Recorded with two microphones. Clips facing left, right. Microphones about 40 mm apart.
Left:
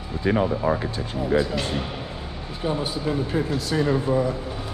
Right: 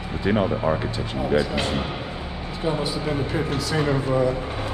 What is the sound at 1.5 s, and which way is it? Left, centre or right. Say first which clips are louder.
Mantra: right 2 dB; right.